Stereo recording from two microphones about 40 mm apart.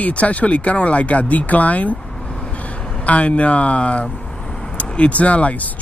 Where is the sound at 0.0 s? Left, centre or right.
Left.